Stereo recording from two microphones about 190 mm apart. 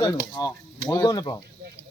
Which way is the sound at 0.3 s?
20° left (ahead or behind).